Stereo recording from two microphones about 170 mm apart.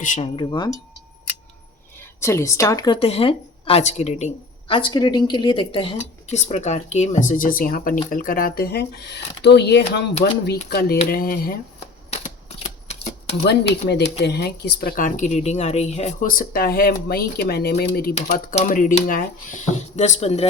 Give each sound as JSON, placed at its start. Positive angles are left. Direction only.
{"t": 0.0, "sound": "speech", "side_deg": 50}
{"t": 0.3, "sound": "speech", "side_deg": 25}
{"t": 2.0, "sound": "speech", "side_deg": 15}
{"t": 4.7, "sound": "speech", "side_deg": 30}
{"t": 10.7, "sound": "a woman's voice", "side_deg": 65}
{"t": 12.1, "sound": "typewriter", "side_deg": 40}
{"t": 14.2, "sound": "a woman's voice", "side_deg": 80}
{"t": 18.5, "sound": "speech", "side_deg": 50}